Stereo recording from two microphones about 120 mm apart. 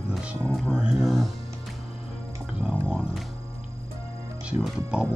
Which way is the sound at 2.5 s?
5° right (ahead or behind).